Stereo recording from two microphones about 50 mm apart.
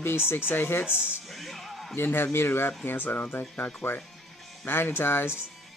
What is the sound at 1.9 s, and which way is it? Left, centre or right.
Speech, left.